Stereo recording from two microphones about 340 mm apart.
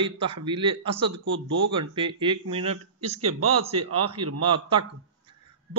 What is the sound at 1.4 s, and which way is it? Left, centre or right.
Speech, right.